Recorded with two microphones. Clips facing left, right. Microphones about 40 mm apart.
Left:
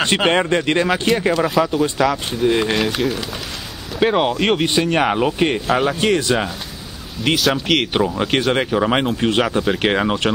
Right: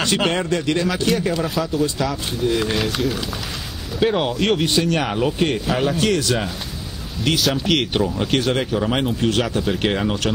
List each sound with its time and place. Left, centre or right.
0.0 s speech: left
1.3 s speech: centre
2.4 s speech: left
3.0 s speech: centre
4.0 s speech: centre
7.3 s speech: centre
8.1 s speech: centre
9.8 s speech: left